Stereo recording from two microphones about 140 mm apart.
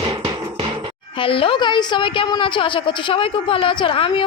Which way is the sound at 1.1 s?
40° left (ahead or behind).